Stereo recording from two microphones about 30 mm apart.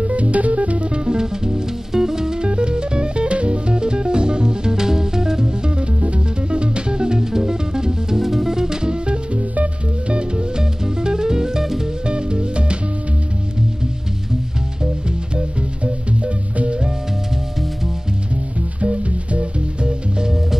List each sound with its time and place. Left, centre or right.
0.0 s music: right
0.8 s music: right
2.4 s music: right
5.8 s music: right
8.2 s drum kit: centre
8.5 s music: right
10.6 s music: right
12.1 s music: right
15.3 s music: right
18.8 s music: right